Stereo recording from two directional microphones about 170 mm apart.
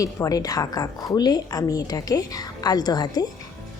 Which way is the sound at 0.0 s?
20° left (ahead or behind).